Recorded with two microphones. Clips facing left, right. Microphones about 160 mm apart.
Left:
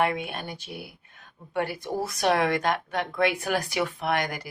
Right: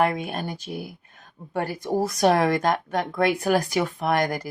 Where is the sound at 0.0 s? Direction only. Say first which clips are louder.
Right 3 dB; 40° right (ahead or behind).